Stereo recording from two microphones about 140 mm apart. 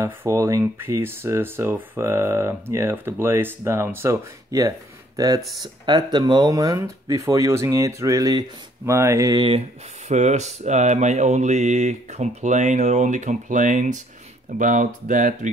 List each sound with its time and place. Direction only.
0.0 s speech: 20° right (ahead or behind)
10.0 s mantra: 55° right (ahead or behind)
14.6 s speech: 65° right (ahead or behind)